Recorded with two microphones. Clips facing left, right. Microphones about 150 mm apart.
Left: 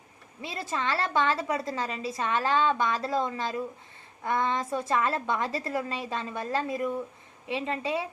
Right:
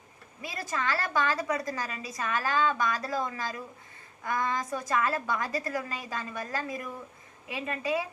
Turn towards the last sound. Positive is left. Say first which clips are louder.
# left 1 dB
turn(degrees=25)  # may be behind; listen again after turning